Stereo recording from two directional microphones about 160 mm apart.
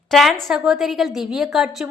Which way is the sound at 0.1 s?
Centre (ahead or behind).